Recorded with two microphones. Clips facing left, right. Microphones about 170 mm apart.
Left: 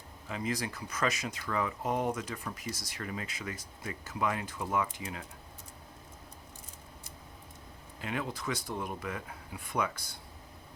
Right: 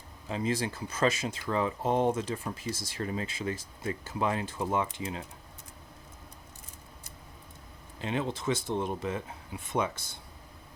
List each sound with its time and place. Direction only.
0.3 s speech: 30° right (ahead or behind)
8.0 s speech: 25° right (ahead or behind)